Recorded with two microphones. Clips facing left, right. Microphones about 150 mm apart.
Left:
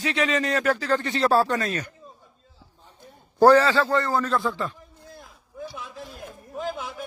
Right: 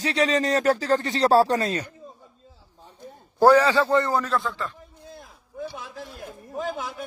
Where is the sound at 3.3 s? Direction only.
10° right (ahead or behind).